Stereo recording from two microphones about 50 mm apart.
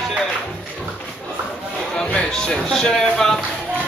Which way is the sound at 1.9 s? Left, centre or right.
Centre.